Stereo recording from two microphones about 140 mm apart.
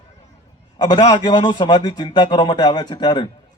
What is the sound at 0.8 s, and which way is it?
A man's voice, 30° left (ahead or behind).